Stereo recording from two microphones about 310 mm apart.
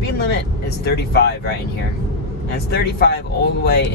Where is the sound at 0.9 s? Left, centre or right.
Left.